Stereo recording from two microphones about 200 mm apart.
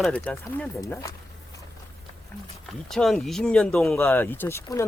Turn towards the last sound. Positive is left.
turn(degrees=15)  # may be behind; listen again after turning